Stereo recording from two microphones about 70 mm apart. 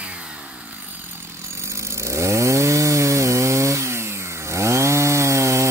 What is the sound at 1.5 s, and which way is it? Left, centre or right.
Chainsaw, right.